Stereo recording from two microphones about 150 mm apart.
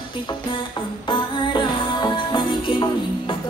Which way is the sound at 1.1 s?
30° left (ahead or behind).